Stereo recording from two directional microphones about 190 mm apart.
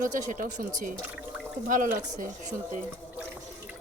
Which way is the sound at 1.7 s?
45° right (ahead or behind).